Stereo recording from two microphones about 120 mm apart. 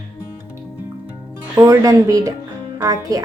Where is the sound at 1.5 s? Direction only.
30° right (ahead or behind).